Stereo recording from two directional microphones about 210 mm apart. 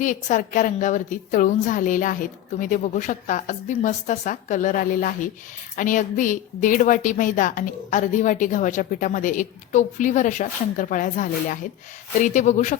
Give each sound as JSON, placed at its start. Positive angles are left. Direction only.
{"t": 0.0, "sound": "a woman's voice", "side_deg": 35}